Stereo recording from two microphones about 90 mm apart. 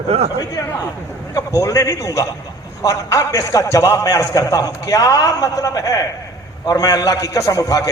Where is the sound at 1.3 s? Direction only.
40° left (ahead or behind).